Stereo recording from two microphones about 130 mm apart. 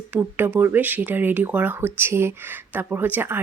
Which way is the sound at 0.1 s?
15° right (ahead or behind).